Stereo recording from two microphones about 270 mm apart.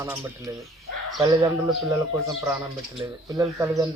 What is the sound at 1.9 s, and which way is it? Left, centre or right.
Speech, centre.